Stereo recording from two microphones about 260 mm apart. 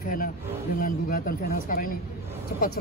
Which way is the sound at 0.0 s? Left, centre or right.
Left.